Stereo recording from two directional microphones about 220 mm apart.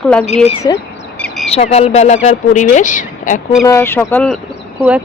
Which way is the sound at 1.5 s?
30° left (ahead or behind).